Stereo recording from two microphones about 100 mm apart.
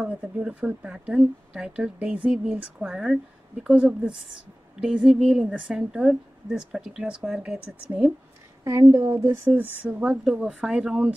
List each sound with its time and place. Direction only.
0.0 s a woman's voice: 15° right (ahead or behind)
8.6 s a woman's voice: 30° right (ahead or behind); by 11.1 s 10° right (ahead or behind)